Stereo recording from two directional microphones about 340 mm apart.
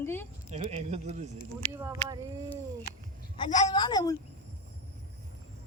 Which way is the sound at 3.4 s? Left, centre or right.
Centre.